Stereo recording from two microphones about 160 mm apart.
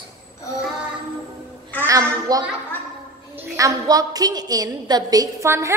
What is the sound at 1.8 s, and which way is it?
Speech, 20° right (ahead or behind).